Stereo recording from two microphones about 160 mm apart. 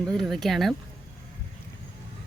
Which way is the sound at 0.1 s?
Centre (ahead or behind).